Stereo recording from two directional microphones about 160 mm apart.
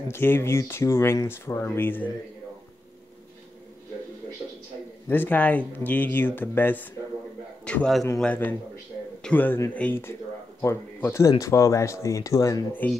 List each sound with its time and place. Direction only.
0.1 s speech: 15° left (ahead or behind)
5.0 s a man's voice: 10° left (ahead or behind)